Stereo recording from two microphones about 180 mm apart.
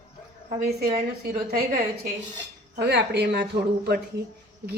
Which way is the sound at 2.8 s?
70° right (ahead or behind).